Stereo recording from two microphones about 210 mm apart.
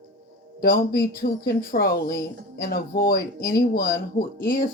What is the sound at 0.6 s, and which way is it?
A woman's voice, 45° left (ahead or behind).